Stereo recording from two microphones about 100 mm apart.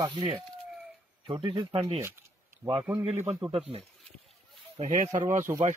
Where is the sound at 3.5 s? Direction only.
75° right (ahead or behind).